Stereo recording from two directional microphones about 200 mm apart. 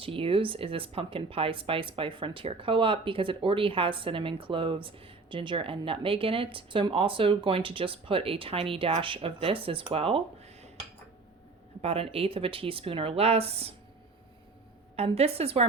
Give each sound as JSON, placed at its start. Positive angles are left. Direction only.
{"t": 0.0, "sound": "speech", "side_deg": -25}
{"t": 11.8, "sound": "speech", "side_deg": -30}
{"t": 14.9, "sound": "speech", "side_deg": -30}